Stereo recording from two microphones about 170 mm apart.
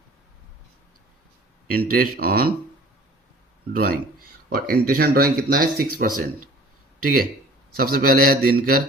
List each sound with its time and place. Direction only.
1.7 s speech: 60° right (ahead or behind)
3.7 s speech: 60° right (ahead or behind)
7.8 s speech: 60° right (ahead or behind)